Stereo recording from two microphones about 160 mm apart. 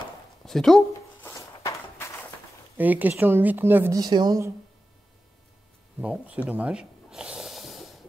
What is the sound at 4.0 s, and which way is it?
Speech, 25° right (ahead or behind).